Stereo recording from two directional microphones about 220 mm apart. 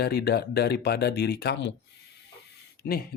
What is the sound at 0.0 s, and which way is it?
Speech, 45° left (ahead or behind).